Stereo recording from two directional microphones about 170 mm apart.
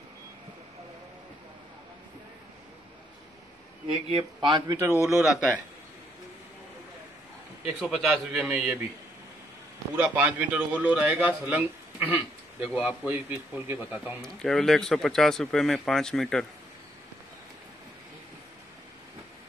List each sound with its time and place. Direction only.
3.8 s speech: 30° right (ahead or behind)
5.0 s speech: centre (ahead or behind)
7.9 s speech: 5° right (ahead or behind)
9.9 s a man's voice: 10° right (ahead or behind)
14.2 s speech: 5° left (ahead or behind)